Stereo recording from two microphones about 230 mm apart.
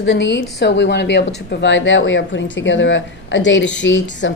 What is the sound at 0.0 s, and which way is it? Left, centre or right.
A woman's voice, left.